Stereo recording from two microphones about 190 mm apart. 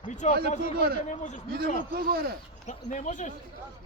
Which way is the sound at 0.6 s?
50° right (ahead or behind).